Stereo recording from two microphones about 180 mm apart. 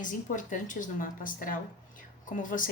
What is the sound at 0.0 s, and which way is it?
A woman's voice, 45° left (ahead or behind).